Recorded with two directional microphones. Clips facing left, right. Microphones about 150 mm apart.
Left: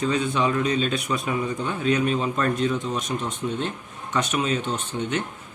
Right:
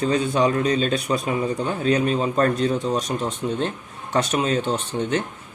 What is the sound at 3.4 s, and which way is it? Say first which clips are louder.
Speech: right 2 dB; 20° right (ahead or behind).